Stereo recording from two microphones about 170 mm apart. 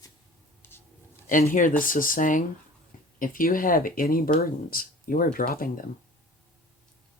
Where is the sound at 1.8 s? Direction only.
55° left (ahead or behind).